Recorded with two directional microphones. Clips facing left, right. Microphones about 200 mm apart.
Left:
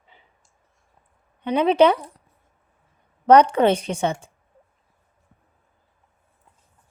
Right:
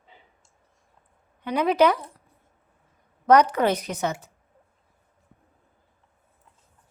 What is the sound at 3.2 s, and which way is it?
Speech, 30° left (ahead or behind).